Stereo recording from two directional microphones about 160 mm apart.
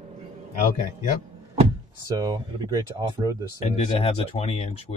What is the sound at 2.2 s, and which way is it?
Speech, 25° right (ahead or behind).